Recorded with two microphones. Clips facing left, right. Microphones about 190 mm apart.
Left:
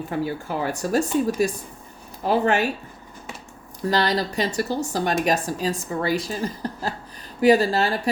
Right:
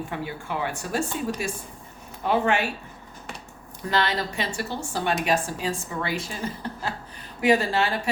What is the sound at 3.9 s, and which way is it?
Speech, 35° left (ahead or behind).